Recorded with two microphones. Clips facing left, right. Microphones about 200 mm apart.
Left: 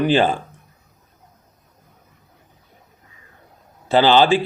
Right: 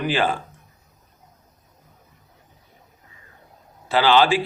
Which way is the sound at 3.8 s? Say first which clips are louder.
Left 3 dB; 30° left (ahead or behind).